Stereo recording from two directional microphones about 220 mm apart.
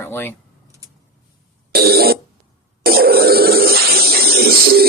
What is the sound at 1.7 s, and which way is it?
Cough, 45° right (ahead or behind).